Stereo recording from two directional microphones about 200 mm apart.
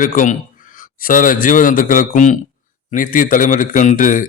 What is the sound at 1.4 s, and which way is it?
A man's voice, 40° left (ahead or behind).